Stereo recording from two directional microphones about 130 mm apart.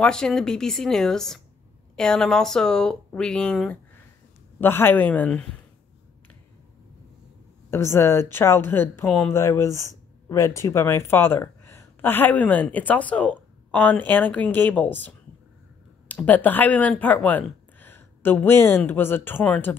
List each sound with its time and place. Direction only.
0.0 s speech: 5° left (ahead or behind)
4.6 s speech: 15° left (ahead or behind)
7.7 s speech: 20° left (ahead or behind)